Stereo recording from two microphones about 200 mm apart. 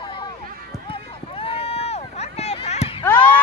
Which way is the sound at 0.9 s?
25° left (ahead or behind).